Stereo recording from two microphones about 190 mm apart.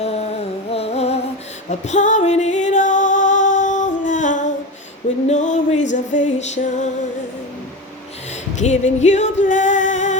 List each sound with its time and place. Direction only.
0.0 s music: 35° left (ahead or behind)
8.5 s music: 35° left (ahead or behind)